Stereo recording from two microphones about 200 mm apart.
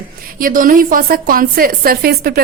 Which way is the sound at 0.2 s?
45° right (ahead or behind).